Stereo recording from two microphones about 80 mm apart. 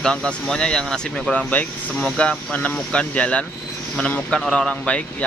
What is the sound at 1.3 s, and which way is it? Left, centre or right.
Speech, centre.